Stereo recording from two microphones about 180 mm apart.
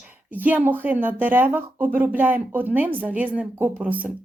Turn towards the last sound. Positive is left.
turn(degrees=-10)  # may be behind; listen again after turning